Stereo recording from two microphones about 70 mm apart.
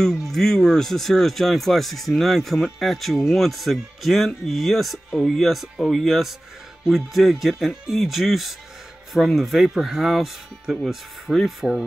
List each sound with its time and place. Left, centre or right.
0.0 s speech: centre